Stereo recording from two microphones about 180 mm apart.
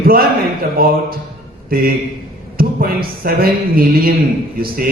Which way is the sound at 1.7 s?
55° right (ahead or behind).